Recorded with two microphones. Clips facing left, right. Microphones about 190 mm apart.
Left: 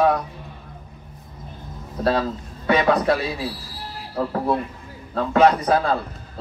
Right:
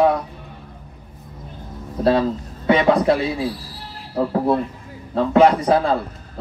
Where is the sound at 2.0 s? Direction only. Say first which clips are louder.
Right 4 dB; 25° right (ahead or behind).